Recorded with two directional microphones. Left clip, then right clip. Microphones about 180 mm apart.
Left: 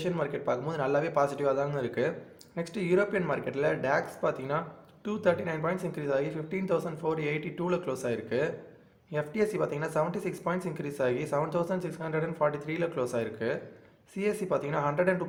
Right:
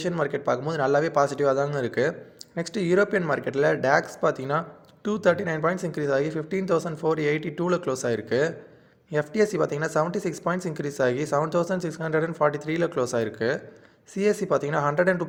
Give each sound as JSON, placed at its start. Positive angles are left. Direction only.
{"t": 0.0, "sound": "speech", "side_deg": -30}